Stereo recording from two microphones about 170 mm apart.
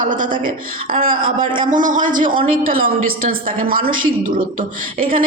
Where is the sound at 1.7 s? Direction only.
50° right (ahead or behind).